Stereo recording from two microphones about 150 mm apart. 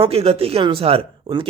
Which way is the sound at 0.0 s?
40° right (ahead or behind).